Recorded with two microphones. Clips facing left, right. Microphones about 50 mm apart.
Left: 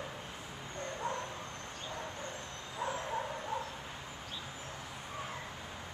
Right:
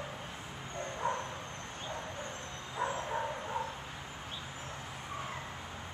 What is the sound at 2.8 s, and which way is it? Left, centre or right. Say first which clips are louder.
Bow-wow: right 2 dB; right.